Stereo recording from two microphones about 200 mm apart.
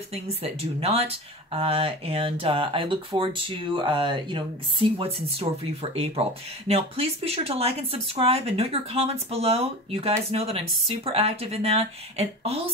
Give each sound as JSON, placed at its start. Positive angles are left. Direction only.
{"t": 0.1, "sound": "speech", "side_deg": -30}